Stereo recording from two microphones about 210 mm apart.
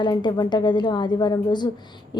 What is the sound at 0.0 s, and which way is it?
A woman's voice, 20° left (ahead or behind).